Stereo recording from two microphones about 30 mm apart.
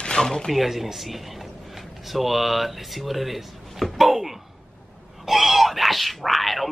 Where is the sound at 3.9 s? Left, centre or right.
Centre.